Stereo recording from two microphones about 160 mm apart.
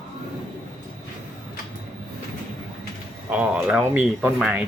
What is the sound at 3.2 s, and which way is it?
Speech, 10° right (ahead or behind).